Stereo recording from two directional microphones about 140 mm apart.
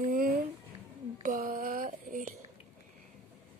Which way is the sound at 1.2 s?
70° right (ahead or behind).